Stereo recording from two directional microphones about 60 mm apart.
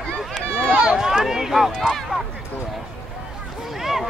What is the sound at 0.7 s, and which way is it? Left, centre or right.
Speech, centre.